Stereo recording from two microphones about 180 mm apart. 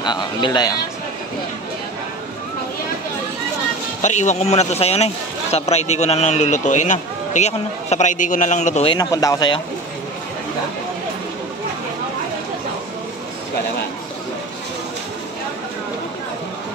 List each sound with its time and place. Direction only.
0.0 s a man's voice: 25° left (ahead or behind)
4.0 s a man's voice: 40° left (ahead or behind)
8.9 s a man's voice: 20° left (ahead or behind)